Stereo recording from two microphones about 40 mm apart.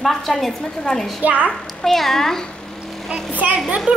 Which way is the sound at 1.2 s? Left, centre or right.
Right.